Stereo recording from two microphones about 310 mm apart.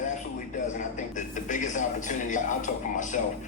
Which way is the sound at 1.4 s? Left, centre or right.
Left.